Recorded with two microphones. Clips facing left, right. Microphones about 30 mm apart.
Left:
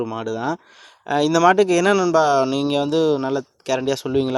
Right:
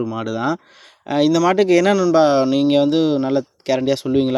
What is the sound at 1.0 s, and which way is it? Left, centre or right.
Speech, right.